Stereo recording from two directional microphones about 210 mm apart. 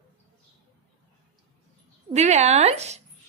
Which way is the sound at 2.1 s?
30° right (ahead or behind).